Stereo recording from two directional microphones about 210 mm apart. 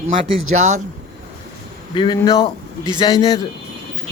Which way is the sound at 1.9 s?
20° left (ahead or behind).